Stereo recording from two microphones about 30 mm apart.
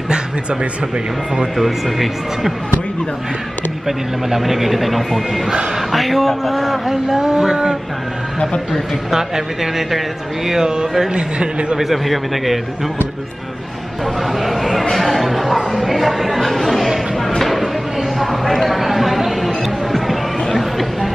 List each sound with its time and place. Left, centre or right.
1.6 s a man's voice: centre
4.3 s a man's voice: centre
6.9 s speech: centre
9.1 s speech: centre
11.8 s a man's voice: centre
14.4 s a man's voice: centre
17.4 s a sound: centre
19.9 s chatter: centre